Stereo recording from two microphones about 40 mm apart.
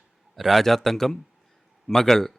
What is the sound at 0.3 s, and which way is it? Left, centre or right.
A man's voice, centre.